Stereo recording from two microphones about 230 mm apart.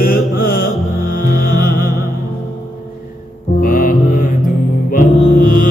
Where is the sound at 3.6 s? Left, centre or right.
Left.